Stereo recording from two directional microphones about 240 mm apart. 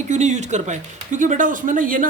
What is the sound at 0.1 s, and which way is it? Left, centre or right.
A man's voice, right.